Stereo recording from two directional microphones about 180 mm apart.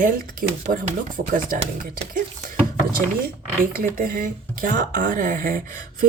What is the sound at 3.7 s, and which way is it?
Speech, 50° right (ahead or behind).